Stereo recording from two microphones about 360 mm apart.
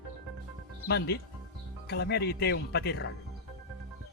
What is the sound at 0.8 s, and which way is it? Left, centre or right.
Speech, left.